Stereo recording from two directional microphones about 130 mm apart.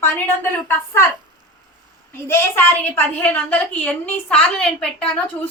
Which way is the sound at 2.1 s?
20° left (ahead or behind).